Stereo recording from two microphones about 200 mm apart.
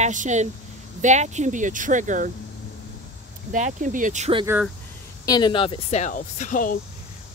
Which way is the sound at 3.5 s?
40° right (ahead or behind).